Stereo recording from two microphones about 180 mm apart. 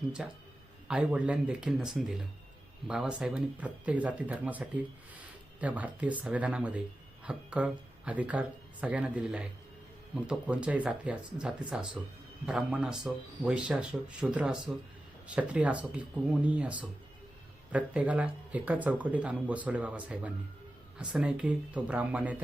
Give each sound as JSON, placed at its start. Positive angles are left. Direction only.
{"t": 0.2, "sound": "speech", "side_deg": -5}